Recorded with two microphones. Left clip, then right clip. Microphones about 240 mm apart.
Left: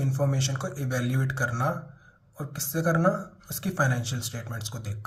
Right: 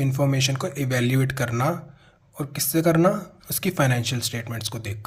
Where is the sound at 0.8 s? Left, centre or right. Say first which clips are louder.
Right 8 dB; right.